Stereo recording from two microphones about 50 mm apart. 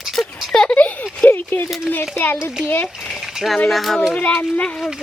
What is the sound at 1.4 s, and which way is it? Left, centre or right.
A child's voice, left.